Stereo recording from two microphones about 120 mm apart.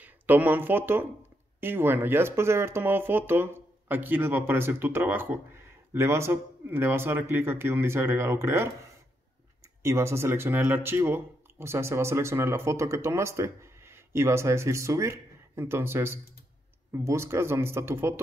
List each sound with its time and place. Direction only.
0.0 s speech: 15° right (ahead or behind)